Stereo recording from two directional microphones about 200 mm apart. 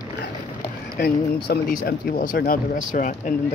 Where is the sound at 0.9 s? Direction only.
55° left (ahead or behind).